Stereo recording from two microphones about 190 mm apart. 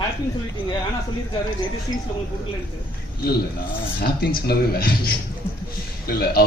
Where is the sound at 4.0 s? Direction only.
55° left (ahead or behind).